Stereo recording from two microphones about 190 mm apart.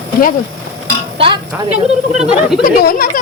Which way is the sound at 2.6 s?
45° left (ahead or behind).